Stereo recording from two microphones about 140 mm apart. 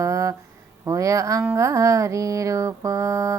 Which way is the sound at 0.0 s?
25° right (ahead or behind).